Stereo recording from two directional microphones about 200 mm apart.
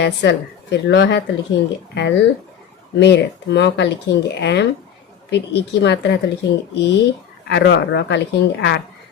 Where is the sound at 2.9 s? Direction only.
60° left (ahead or behind).